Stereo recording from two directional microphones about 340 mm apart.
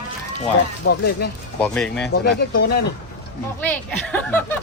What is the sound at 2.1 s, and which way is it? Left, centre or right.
Speech, left.